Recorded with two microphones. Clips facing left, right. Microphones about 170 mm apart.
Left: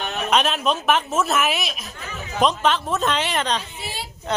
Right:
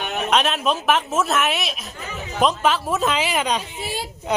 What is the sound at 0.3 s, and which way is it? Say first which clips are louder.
A man's voice: even; centre (ahead or behind).